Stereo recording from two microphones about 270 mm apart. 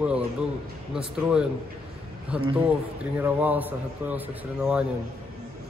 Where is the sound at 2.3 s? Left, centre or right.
Centre.